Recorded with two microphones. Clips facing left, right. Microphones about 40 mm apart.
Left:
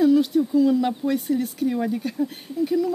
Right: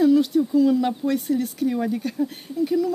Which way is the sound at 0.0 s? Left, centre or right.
Centre.